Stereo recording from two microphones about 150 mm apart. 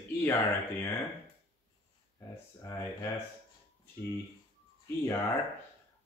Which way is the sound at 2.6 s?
20° left (ahead or behind).